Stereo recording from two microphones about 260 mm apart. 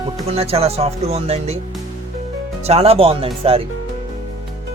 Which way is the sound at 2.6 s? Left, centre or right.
Right.